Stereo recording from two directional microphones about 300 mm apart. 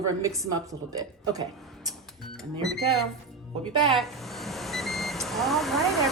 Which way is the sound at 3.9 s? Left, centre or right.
Centre.